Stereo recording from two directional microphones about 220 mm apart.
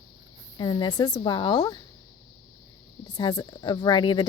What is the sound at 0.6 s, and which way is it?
Speech, 20° left (ahead or behind).